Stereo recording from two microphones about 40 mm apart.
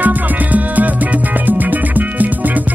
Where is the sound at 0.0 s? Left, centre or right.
Right.